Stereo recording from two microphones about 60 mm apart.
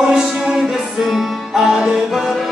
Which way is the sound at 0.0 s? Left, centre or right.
Centre.